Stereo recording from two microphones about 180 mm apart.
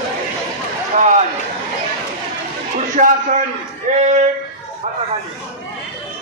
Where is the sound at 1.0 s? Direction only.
45° right (ahead or behind).